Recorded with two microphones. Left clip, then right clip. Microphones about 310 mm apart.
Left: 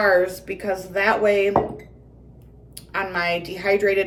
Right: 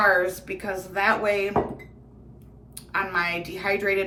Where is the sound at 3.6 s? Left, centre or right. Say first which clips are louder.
Left 5 dB; centre.